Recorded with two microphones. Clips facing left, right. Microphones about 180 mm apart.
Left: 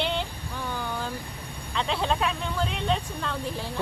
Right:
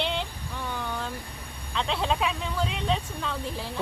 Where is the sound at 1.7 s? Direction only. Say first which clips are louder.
Left 1 dB; centre (ahead or behind).